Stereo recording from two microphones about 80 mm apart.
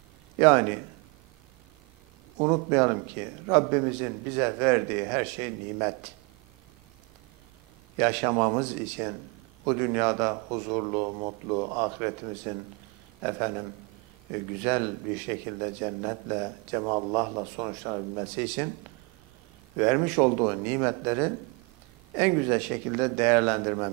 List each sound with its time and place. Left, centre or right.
0.4 s a man's voice: centre
2.5 s a man's voice: centre
8.0 s a man's voice: centre
19.8 s a man's voice: centre